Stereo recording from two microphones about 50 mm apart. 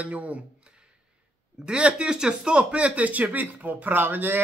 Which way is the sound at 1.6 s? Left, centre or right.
Right.